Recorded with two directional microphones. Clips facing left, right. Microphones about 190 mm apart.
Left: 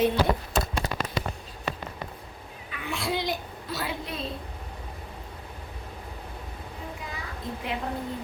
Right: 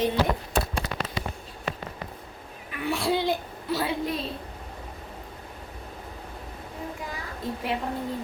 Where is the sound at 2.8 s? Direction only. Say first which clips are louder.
Right 5 dB; 35° right (ahead or behind).